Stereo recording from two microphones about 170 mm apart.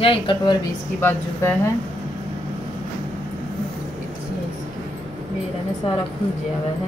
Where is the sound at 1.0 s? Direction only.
10° left (ahead or behind).